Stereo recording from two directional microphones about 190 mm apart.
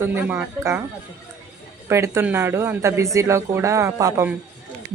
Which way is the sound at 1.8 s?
15° right (ahead or behind).